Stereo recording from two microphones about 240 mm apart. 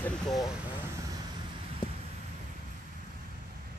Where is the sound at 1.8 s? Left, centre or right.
Centre.